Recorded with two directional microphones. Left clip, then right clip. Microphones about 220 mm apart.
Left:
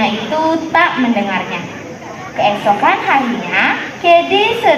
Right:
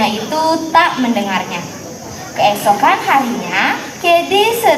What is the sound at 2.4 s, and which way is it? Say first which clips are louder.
A woman's voice: right 1 dB; 25° left (ahead or behind).